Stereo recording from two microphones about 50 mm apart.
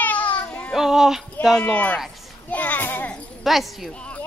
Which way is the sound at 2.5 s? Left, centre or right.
Left.